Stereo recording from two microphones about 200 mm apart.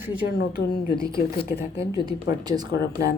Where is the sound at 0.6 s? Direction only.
50° left (ahead or behind).